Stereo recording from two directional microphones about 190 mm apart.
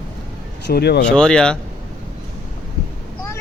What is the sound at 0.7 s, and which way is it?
Speech, 60° left (ahead or behind).